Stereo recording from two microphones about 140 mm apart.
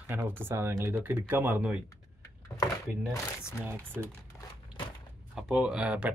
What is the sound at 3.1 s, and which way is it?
Speech, 20° left (ahead or behind).